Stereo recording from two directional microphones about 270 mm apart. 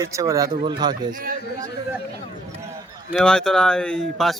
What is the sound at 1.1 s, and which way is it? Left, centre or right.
Speech, right.